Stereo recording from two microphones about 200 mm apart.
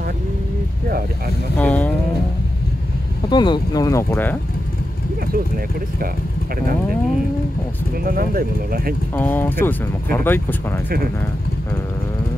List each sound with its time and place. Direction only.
1.6 s speech: 5° left (ahead or behind)
3.3 s speech: 20° left (ahead or behind)
8.0 s speech: 50° right (ahead or behind)
9.1 s speech: 10° left (ahead or behind)